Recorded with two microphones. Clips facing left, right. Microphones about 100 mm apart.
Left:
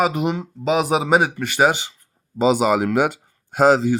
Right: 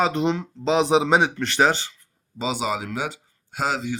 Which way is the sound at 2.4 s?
50° left (ahead or behind).